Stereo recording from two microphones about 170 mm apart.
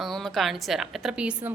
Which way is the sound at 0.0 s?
Centre (ahead or behind).